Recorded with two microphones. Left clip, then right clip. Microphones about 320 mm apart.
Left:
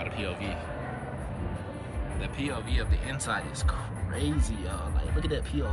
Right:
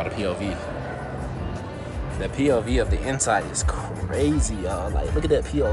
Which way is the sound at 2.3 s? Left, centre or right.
Centre.